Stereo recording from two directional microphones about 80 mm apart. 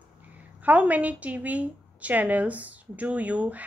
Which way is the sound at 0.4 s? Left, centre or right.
Centre.